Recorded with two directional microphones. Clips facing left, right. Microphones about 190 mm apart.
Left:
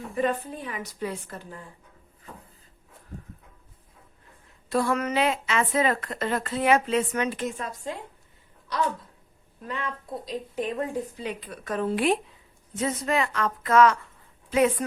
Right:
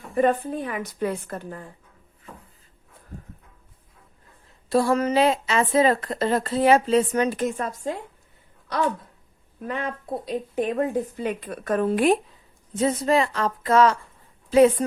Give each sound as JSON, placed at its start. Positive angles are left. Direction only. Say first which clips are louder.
{"t": 0.2, "sound": "a woman's voice", "louder": "right 6 dB", "side_deg": -50}
{"t": 4.7, "sound": "a woman's voice", "louder": "right 5 dB", "side_deg": -30}
{"t": 9.6, "sound": "speech", "louder": "right 5 dB", "side_deg": -50}
{"t": 12.7, "sound": "a woman's voice", "louder": "right 5 dB", "side_deg": -30}